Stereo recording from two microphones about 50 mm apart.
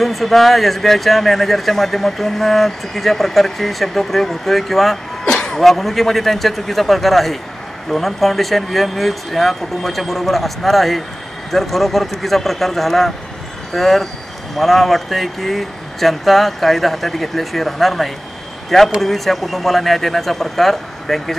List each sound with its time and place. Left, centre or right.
0.0 s speech: centre
5.2 s a sound: centre
5.6 s speech: centre